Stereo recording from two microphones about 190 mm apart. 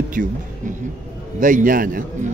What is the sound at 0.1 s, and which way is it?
A man's voice, 45° right (ahead or behind).